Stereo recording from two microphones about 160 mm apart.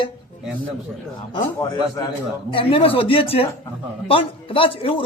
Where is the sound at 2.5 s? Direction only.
35° left (ahead or behind).